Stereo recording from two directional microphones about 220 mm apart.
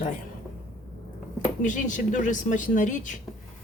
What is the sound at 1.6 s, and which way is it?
Speech, 35° left (ahead or behind).